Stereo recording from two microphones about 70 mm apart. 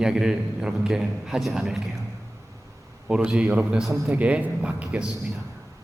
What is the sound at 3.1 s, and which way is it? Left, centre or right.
A man's voice, centre.